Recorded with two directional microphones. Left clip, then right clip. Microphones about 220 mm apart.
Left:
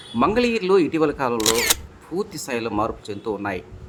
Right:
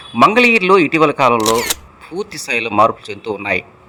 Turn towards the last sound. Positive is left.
turn(degrees=-15)  # may be behind; listen again after turning